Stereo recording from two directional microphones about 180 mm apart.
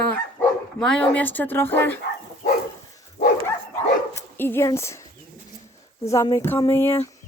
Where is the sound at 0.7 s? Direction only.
5° left (ahead or behind).